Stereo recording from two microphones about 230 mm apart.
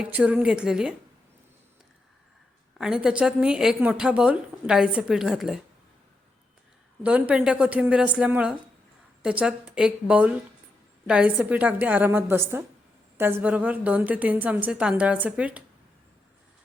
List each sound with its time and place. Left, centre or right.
0.0 s a woman's voice: centre
2.7 s a woman's voice: centre
7.0 s a woman's voice: centre